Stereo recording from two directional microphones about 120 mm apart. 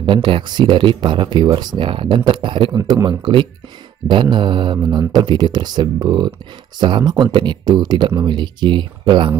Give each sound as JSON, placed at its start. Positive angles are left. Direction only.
{"t": 0.0, "sound": "speech", "side_deg": -45}